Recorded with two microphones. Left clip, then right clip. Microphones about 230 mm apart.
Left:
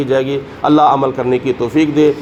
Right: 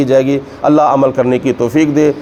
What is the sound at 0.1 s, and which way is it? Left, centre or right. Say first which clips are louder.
A man's voice: right 4 dB; right.